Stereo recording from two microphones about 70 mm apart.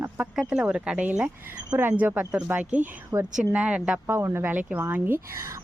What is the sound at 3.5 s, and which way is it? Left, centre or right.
Speech, centre.